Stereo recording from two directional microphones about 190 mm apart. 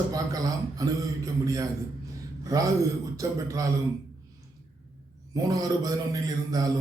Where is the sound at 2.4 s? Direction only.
15° right (ahead or behind).